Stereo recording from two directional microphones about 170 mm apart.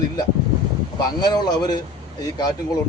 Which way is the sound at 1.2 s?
25° left (ahead or behind).